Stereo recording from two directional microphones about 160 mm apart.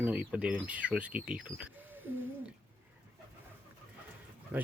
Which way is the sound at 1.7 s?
10° right (ahead or behind).